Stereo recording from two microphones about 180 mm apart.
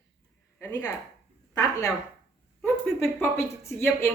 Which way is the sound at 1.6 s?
15° left (ahead or behind).